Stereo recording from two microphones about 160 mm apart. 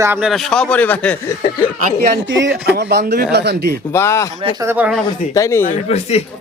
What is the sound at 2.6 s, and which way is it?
Speech, 90° right.